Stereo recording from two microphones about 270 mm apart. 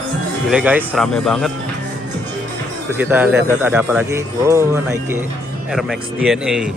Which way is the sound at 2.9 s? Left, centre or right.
Centre.